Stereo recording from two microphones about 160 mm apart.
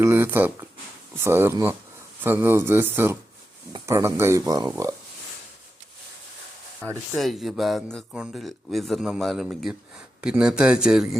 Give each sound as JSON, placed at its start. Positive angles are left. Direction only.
{"t": 0.0, "sound": "speech", "side_deg": -15}
{"t": 7.2, "sound": "speech", "side_deg": 0}